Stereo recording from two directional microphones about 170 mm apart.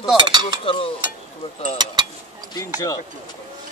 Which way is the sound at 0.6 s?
30° left (ahead or behind).